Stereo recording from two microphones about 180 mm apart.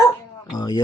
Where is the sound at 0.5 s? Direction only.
20° left (ahead or behind).